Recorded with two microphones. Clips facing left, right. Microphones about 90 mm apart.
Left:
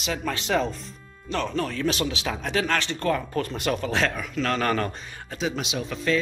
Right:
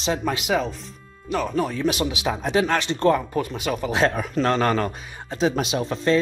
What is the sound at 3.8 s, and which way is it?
Speech, 15° right (ahead or behind).